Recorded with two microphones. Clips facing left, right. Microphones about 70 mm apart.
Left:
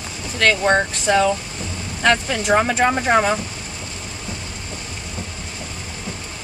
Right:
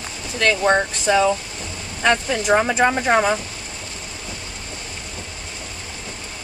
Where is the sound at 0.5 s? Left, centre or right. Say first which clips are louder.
Even; centre.